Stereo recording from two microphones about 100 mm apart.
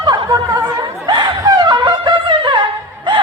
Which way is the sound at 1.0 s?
45° right (ahead or behind).